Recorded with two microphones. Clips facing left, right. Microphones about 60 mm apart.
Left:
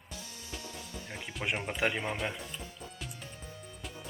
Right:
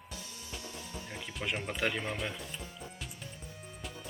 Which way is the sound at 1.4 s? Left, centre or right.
Centre.